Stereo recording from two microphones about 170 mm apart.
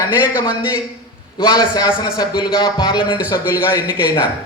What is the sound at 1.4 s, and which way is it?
A man's voice, 25° left (ahead or behind).